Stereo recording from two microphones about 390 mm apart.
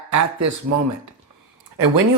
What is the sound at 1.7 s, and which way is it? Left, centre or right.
Speech, right.